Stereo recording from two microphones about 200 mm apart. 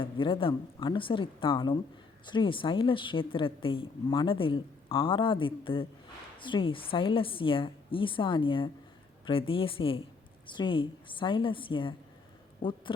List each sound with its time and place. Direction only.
0.0 s a woman's voice: 25° left (ahead or behind)